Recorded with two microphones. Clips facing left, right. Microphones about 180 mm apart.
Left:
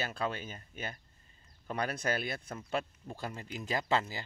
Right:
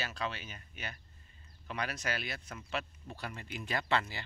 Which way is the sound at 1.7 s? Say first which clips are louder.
Left 4 dB; 50° left (ahead or behind).